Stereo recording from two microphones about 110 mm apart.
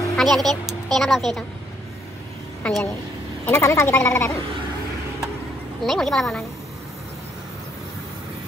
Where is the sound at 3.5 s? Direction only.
25° left (ahead or behind).